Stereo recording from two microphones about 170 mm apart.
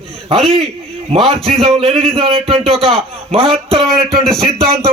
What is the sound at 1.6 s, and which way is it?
A man's voice, 35° right (ahead or behind).